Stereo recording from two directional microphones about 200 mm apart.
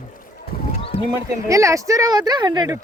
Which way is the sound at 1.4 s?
15° right (ahead or behind).